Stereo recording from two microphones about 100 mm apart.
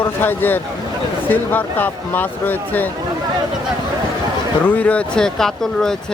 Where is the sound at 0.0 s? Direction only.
20° left (ahead or behind).